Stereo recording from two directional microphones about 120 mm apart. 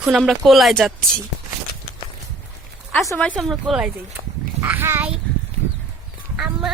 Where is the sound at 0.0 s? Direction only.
Centre (ahead or behind).